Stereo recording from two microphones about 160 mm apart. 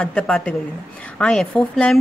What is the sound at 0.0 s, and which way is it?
A woman's voice, 5° left (ahead or behind).